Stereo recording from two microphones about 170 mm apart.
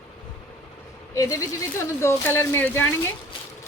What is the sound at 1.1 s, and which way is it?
A woman's voice, 20° left (ahead or behind).